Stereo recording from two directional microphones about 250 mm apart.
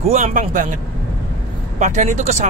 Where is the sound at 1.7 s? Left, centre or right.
Right.